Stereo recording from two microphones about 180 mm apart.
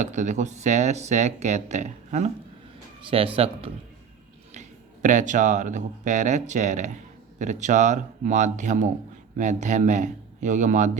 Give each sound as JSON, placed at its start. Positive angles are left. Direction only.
{"t": 0.0, "sound": "speech", "side_deg": -40}
{"t": 5.0, "sound": "speech", "side_deg": -45}